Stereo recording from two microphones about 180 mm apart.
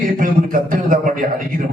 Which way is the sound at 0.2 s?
50° right (ahead or behind).